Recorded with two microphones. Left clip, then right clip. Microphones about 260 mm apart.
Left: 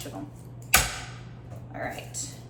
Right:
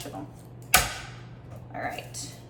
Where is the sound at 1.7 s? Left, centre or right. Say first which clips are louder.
Right 1 dB; centre.